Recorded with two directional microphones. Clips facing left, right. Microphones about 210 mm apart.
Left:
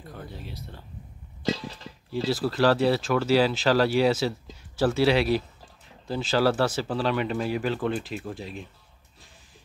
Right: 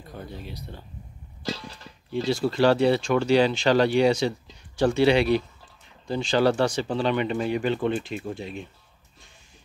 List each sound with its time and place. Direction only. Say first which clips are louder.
0.3 s speech: right 2 dB; centre (ahead or behind)
1.4 s a sound: left 4 dB; 20° left (ahead or behind)
2.1 s speech: right 2 dB; 5° left (ahead or behind)